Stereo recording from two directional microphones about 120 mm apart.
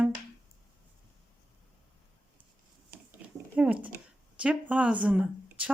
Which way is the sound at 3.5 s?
10° right (ahead or behind).